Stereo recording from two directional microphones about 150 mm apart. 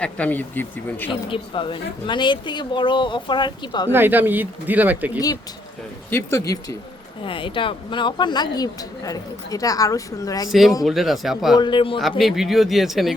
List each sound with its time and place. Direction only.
0.0 s speech: 10° left (ahead or behind)
1.3 s speech: 35° left (ahead or behind)
3.9 s speech: 15° right (ahead or behind)
6.1 s speech: 15° left (ahead or behind)
7.3 s speech: 35° left (ahead or behind)
10.8 s speech: centre (ahead or behind)
11.5 s speech: 30° left (ahead or behind)
11.9 s speech: centre (ahead or behind)